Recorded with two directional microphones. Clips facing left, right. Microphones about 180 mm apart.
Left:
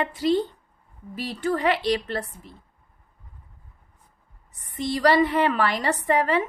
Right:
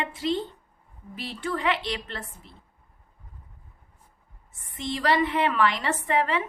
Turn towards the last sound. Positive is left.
turn(degrees=40)  # may be behind; listen again after turning